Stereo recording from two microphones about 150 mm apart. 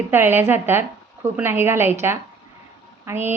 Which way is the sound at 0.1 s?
15° right (ahead or behind).